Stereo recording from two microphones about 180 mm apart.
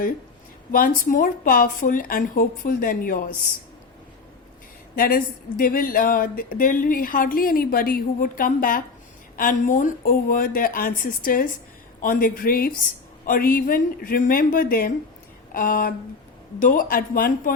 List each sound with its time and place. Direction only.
0.7 s speech: 50° left (ahead or behind)
4.9 s speech: 55° left (ahead or behind)